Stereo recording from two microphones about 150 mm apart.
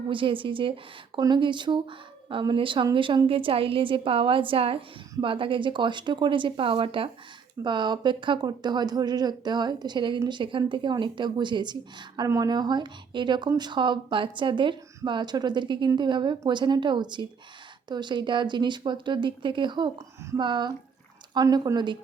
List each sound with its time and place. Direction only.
0.1 s a woman's voice: 35° right (ahead or behind)